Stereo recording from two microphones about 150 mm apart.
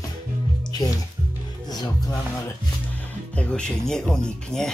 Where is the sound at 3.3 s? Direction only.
5° left (ahead or behind).